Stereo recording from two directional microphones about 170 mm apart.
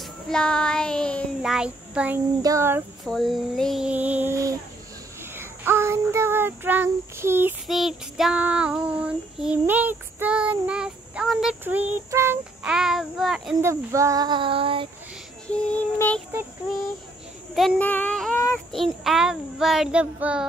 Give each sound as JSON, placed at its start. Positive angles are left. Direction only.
{"t": 0.0, "sound": "child singing", "side_deg": 5}
{"t": 3.1, "sound": "child singing", "side_deg": 0}
{"t": 7.6, "sound": "child singing", "side_deg": 0}
{"t": 12.6, "sound": "child singing", "side_deg": -5}
{"t": 13.6, "sound": "child singing", "side_deg": -15}
{"t": 15.4, "sound": "child singing", "side_deg": 5}
{"t": 17.6, "sound": "child singing", "side_deg": 5}